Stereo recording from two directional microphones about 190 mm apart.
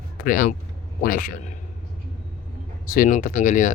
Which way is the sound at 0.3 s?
45° left (ahead or behind).